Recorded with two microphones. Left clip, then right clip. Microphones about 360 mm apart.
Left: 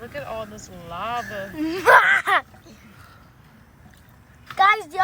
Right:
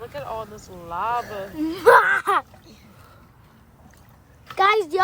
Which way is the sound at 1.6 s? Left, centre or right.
Centre.